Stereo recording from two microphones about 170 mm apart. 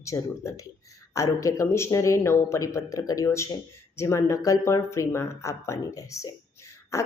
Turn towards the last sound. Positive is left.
turn(degrees=20)  # may be behind; listen again after turning